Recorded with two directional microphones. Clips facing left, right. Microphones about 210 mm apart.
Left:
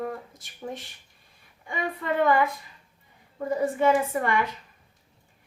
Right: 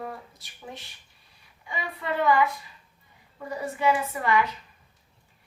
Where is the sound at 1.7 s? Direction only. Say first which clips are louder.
Left 3 dB; 50° left (ahead or behind).